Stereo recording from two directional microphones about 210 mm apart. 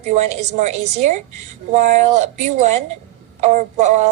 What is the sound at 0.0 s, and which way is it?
A woman's voice, 35° right (ahead or behind).